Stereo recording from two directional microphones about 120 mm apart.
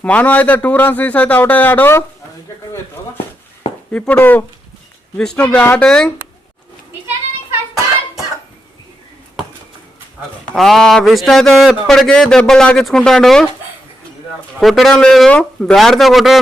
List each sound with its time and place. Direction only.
0.0 s a man's voice: 10° left (ahead or behind)
3.9 s a man's voice: 15° left (ahead or behind)
10.5 s speech: 5° left (ahead or behind)
14.6 s speech: centre (ahead or behind)